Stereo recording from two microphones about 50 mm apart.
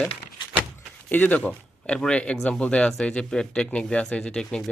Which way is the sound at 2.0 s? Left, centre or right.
Left.